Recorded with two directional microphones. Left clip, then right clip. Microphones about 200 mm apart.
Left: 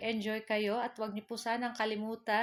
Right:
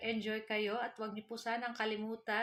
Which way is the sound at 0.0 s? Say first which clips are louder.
Left 3 dB; 35° left (ahead or behind).